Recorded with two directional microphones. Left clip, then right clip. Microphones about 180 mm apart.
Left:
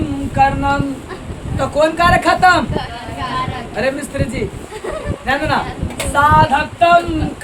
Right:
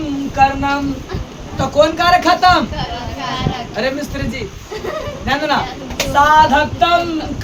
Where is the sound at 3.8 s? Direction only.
25° left (ahead or behind).